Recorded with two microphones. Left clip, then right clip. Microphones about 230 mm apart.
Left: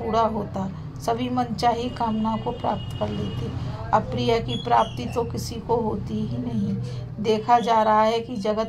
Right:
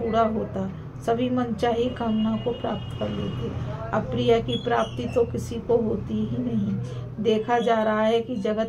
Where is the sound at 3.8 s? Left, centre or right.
Left.